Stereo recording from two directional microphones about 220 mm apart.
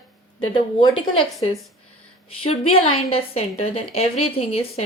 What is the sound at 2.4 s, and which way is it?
Speech, 25° left (ahead or behind).